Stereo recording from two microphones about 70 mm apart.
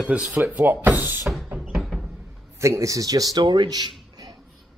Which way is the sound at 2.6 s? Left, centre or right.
Right.